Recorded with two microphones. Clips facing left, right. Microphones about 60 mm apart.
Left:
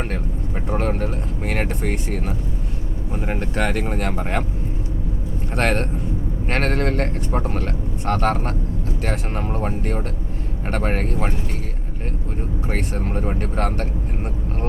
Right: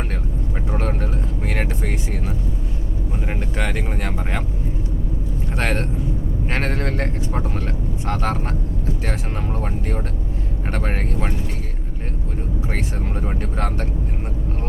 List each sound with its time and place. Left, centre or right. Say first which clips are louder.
0.7 s vehicle: left 3 dB; left
3.6 s speech: left 4 dB; left
5.5 s speech: left 3 dB; left
12.7 s speech: left 5 dB; left